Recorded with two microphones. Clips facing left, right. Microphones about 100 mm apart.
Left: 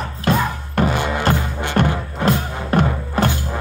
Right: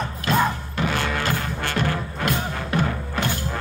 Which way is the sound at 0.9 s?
15° left (ahead or behind).